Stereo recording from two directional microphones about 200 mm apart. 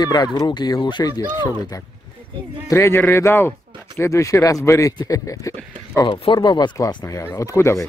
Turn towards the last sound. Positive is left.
turn(degrees=15)  # may be behind; listen again after turning